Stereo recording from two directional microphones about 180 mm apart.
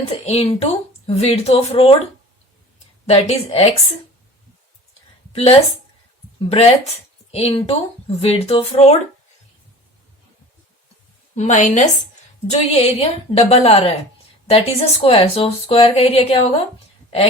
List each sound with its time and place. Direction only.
0.1 s a woman's voice: 35° left (ahead or behind)
5.3 s a woman's voice: 30° left (ahead or behind)
11.3 s speech: 40° left (ahead or behind)